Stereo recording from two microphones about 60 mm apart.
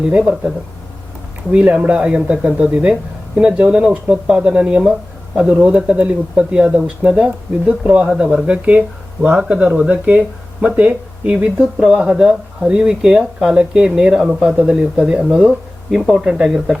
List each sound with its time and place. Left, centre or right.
0.1 s speech: centre
1.5 s speech: right
5.5 s speech: right
11.6 s speech: centre